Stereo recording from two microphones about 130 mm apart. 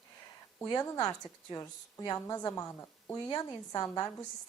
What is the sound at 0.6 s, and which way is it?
A woman's voice, 30° left (ahead or behind).